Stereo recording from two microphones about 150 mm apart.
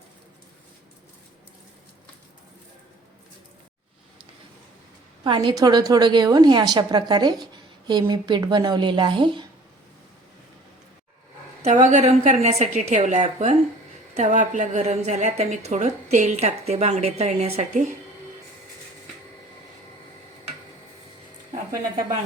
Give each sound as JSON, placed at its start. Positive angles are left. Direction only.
{"t": 5.2, "sound": "a woman's voice", "side_deg": -30}
{"t": 11.6, "sound": "a woman's voice", "side_deg": -50}
{"t": 21.7, "sound": "a woman's voice", "side_deg": -25}